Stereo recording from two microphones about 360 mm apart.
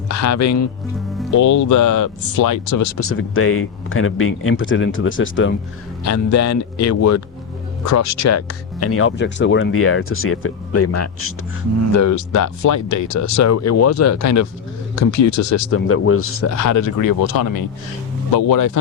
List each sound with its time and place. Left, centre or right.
0.1 s speech: left
3.0 s speech: left
6.1 s speech: left
11.9 s speech: left